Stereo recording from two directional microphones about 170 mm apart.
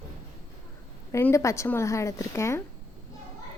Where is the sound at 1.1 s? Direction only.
15° left (ahead or behind).